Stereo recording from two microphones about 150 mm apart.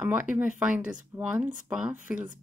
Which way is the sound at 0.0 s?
10° right (ahead or behind).